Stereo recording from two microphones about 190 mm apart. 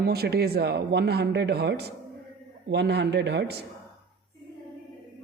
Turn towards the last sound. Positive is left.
turn(degrees=-65)  # may be behind; listen again after turning